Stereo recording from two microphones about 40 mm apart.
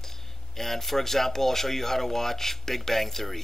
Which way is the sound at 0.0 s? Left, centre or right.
Centre.